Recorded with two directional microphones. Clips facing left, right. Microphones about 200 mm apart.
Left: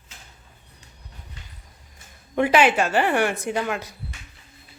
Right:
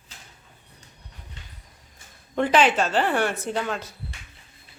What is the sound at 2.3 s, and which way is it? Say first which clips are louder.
A woman's voice: left 2 dB; 10° left (ahead or behind).